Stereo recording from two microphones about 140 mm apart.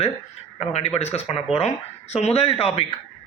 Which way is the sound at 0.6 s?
50° left (ahead or behind).